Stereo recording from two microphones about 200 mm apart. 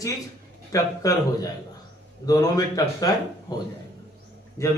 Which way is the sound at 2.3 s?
20° left (ahead or behind).